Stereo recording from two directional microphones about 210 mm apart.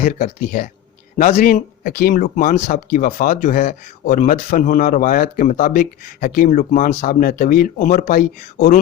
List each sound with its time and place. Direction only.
0.0 s speech: 40° left (ahead or behind)